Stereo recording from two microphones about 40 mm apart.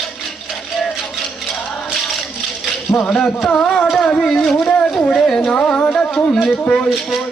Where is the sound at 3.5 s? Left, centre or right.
Left.